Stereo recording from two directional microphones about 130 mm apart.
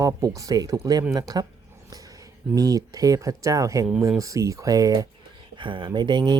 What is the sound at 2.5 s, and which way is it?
Speech, 30° right (ahead or behind).